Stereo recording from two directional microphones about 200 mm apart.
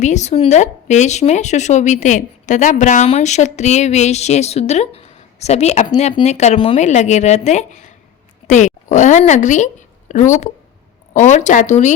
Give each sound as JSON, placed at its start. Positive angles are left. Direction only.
{"t": 0.0, "sound": "a woman's voice", "side_deg": 35}